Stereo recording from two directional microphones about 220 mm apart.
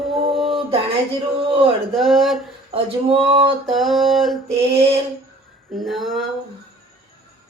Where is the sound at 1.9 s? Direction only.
Centre (ahead or behind).